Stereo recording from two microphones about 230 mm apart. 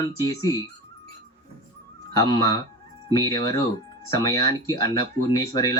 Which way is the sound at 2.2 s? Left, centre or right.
Centre.